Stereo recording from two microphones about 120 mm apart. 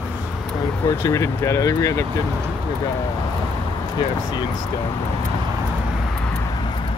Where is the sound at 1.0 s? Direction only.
25° left (ahead or behind).